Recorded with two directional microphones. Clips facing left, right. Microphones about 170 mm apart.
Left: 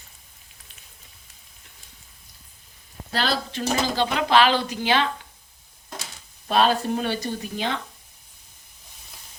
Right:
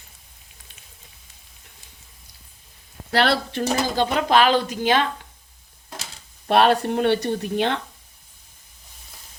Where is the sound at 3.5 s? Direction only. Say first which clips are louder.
Right 2 dB; 45° right (ahead or behind).